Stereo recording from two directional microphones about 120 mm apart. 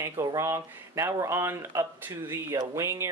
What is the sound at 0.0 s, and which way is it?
Speech, 25° right (ahead or behind).